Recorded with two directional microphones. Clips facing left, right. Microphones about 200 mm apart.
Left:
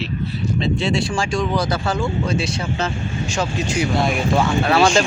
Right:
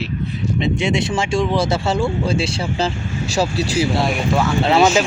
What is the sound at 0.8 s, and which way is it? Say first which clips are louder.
Speech: right 1 dB; 20° right (ahead or behind).